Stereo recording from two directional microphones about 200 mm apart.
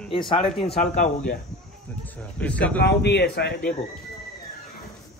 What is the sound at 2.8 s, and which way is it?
Speech, 55° left (ahead or behind).